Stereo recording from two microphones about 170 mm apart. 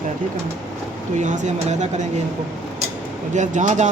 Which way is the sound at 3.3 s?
45° right (ahead or behind).